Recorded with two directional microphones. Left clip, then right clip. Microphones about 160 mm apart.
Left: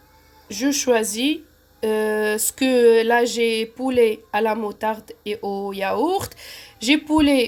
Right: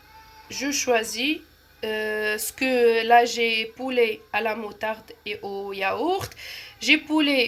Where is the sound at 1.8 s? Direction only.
60° left (ahead or behind).